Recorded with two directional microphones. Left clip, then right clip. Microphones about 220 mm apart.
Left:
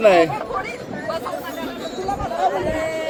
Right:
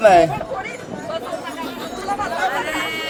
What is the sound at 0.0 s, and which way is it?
Speech, 20° right (ahead or behind).